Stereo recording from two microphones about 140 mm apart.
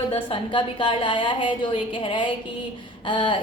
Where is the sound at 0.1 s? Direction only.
35° left (ahead or behind).